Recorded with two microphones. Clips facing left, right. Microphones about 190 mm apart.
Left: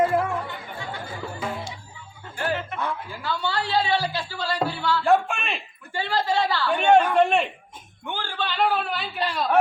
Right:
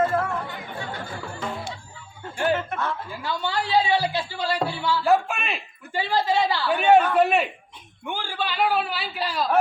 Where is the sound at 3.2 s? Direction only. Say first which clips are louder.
Even; 15° right (ahead or behind).